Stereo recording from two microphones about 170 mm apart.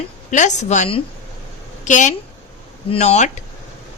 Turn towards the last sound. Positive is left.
turn(degrees=40)  # may be behind; listen again after turning